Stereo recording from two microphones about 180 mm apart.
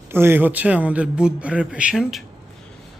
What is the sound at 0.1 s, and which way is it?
Speech, 15° right (ahead or behind).